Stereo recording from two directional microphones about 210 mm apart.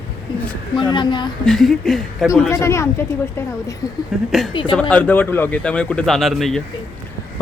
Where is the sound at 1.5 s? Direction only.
Centre (ahead or behind).